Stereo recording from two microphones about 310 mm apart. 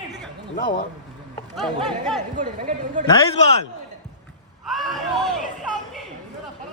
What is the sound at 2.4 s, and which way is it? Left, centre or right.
Speech, right.